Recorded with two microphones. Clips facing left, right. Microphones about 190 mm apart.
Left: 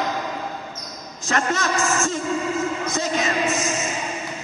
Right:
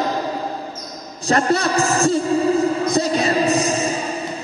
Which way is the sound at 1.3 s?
35° right (ahead or behind).